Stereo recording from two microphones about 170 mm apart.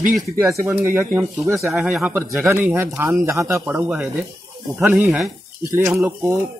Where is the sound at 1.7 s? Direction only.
5° right (ahead or behind).